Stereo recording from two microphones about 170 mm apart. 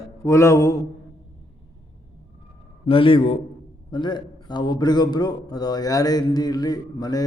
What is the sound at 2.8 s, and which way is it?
A man's voice, 30° left (ahead or behind).